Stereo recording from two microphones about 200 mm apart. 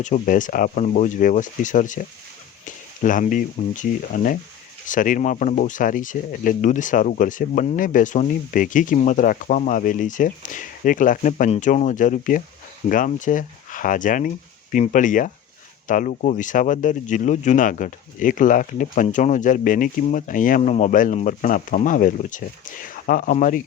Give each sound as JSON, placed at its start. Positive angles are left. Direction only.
{"t": 0.0, "sound": "speech", "side_deg": 40}